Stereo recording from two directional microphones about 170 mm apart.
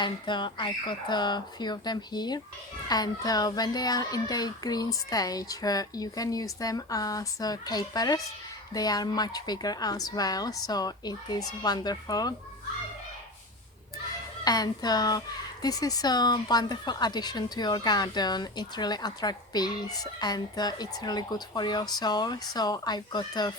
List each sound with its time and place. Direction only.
0.0 s speech: 25° left (ahead or behind)
14.4 s speech: 25° left (ahead or behind)